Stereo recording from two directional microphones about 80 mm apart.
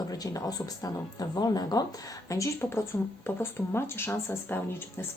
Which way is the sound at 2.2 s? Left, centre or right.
Left.